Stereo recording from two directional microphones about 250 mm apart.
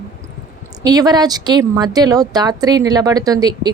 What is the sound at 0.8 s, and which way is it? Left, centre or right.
Speech, centre.